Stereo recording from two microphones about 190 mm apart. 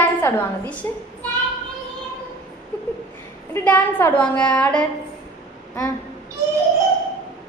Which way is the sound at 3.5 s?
10° left (ahead or behind).